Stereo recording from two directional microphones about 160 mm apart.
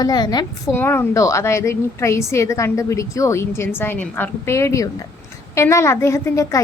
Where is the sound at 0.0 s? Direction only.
25° left (ahead or behind).